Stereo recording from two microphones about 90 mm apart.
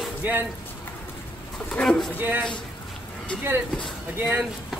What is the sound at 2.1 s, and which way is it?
Speech, 20° right (ahead or behind).